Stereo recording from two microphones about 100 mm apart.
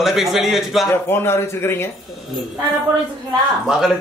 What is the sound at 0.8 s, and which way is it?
Speech, 25° left (ahead or behind).